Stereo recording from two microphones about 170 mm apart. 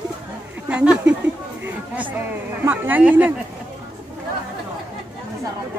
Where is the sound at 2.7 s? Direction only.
10° right (ahead or behind).